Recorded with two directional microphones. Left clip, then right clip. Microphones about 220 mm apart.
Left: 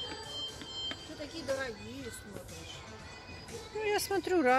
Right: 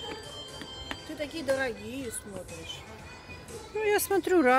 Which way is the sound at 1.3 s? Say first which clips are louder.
Right 7 dB; 45° right (ahead or behind).